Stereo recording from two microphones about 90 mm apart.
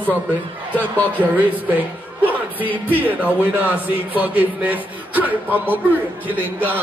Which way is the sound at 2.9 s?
20° right (ahead or behind).